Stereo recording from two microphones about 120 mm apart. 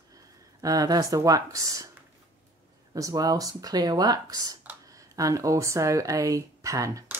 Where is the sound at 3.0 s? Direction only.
30° right (ahead or behind).